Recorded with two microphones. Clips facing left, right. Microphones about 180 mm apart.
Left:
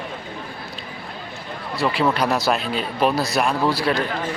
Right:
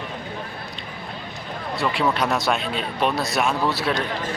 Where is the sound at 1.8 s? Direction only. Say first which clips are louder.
Left 2 dB; centre (ahead or behind).